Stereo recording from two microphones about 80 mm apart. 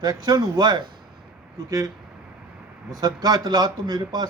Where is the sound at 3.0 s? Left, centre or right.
Right.